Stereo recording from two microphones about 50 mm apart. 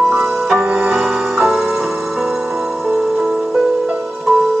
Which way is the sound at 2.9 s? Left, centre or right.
Centre.